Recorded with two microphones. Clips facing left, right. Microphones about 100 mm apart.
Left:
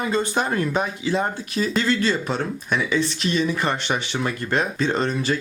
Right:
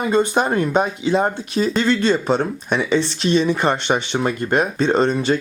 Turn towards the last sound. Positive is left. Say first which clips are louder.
# right 6 dB
turn(degrees=-25)  # may be behind; listen again after turning